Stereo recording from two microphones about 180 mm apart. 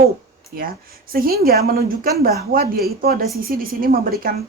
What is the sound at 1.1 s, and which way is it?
A woman's voice, 55° right (ahead or behind).